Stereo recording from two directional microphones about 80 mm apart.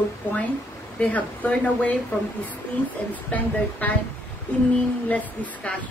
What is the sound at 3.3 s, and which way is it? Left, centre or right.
Speech, left.